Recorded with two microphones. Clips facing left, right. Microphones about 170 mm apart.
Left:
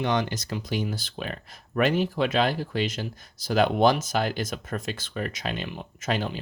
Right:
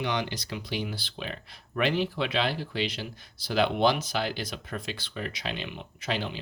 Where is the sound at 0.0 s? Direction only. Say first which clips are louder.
Left 4 dB; 45° left (ahead or behind).